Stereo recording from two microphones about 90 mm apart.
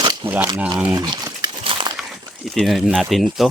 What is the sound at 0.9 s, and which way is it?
Crumpling, 45° right (ahead or behind).